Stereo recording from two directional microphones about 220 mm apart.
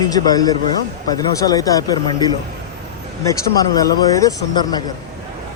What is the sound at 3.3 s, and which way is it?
Speech, 15° left (ahead or behind).